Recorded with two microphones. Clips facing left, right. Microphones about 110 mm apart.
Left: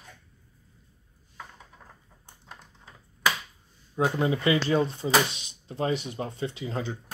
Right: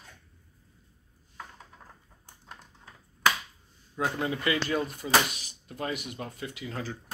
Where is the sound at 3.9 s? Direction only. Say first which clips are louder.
Left 5 dB; 25° left (ahead or behind).